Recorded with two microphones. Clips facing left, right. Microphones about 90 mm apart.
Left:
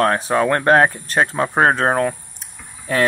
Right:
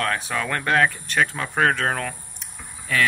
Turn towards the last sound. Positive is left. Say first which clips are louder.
# left 4 dB
turn(degrees=35)  # may be behind; listen again after turning